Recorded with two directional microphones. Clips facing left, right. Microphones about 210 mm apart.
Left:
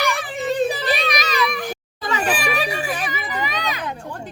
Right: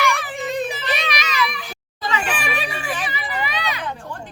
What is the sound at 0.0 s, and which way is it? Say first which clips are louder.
Children playing: even; 30° left (ahead or behind).